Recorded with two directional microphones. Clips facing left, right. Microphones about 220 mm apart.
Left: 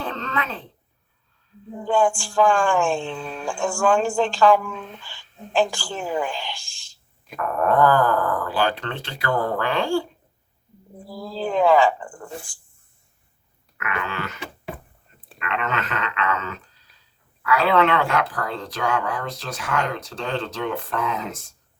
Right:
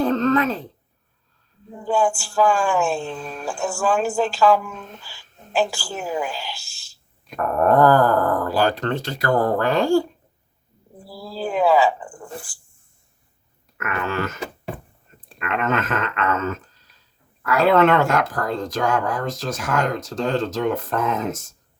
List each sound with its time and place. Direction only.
0.0 s a sound: 40° right (ahead or behind)
1.8 s a woman's voice: 5° right (ahead or behind)
7.3 s speech: 40° right (ahead or behind)
11.0 s speech: 5° right (ahead or behind)
13.7 s a sound: 45° right (ahead or behind)
15.4 s speech: 45° right (ahead or behind)